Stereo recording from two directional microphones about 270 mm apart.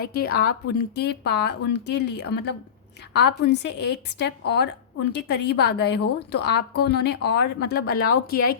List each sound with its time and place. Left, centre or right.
0.0 s a woman's voice: left